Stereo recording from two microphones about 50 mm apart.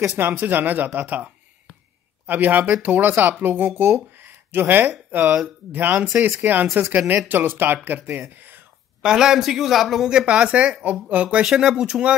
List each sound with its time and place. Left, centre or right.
0.0 s speech: right
0.3 s speech: right
3.9 s a sound: right
5.7 s speech: right
9.0 s speech: centre
10.0 s speech: centre
11.4 s speech: centre